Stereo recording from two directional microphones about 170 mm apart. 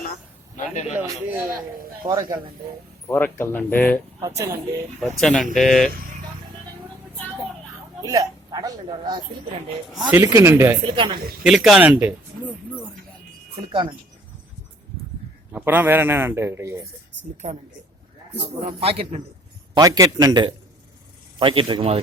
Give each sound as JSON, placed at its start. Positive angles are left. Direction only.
{"t": 0.5, "sound": "a man's voice", "side_deg": 45}
{"t": 0.9, "sound": "a man's voice", "side_deg": -10}
{"t": 3.1, "sound": "speech", "side_deg": 10}
{"t": 4.2, "sound": "speech", "side_deg": -20}
{"t": 4.9, "sound": "speech", "side_deg": 5}
{"t": 8.0, "sound": "speech", "side_deg": -20}
{"t": 10.0, "sound": "a man's voice", "side_deg": -10}
{"t": 10.8, "sound": "speech", "side_deg": -30}
{"t": 11.4, "sound": "speech", "side_deg": 0}
{"t": 15.5, "sound": "a man's voice", "side_deg": -10}
{"t": 18.6, "sound": "a man's voice", "side_deg": -35}
{"t": 19.7, "sound": "a man's voice", "side_deg": -20}